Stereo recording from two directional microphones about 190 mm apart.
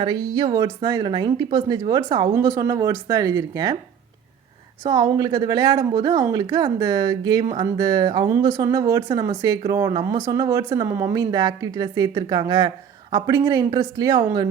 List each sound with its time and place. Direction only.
0.0 s a woman's voice: 25° right (ahead or behind)
4.8 s a woman's voice: 20° right (ahead or behind)